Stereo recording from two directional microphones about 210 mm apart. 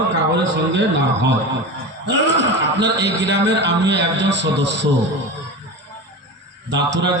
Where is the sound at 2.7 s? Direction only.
55° right (ahead or behind).